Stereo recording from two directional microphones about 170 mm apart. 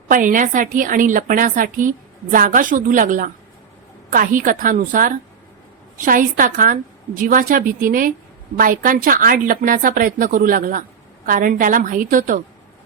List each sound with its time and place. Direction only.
0.1 s a woman's voice: 50° right (ahead or behind)